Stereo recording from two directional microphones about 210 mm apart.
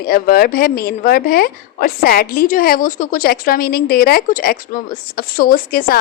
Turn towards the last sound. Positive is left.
turn(degrees=45)  # may be behind; listen again after turning